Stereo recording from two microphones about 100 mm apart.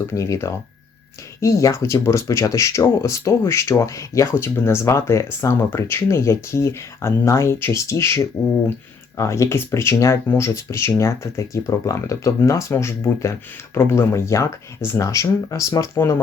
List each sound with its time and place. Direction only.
0.1 s speech: 30° left (ahead or behind)